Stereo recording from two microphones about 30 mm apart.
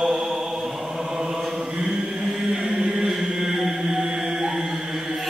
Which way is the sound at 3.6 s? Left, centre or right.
Centre.